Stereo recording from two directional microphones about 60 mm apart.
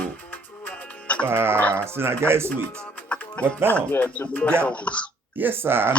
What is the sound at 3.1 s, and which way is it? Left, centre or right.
Music, left.